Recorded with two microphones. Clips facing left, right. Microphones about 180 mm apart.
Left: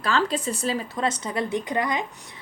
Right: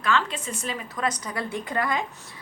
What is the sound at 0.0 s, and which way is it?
A woman's voice, 35° left (ahead or behind).